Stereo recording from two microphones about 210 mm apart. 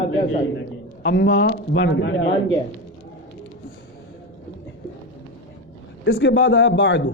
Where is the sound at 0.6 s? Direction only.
60° left (ahead or behind).